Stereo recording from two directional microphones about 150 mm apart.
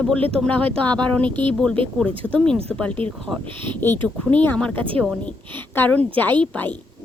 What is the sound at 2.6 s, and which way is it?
Speech, 10° left (ahead or behind).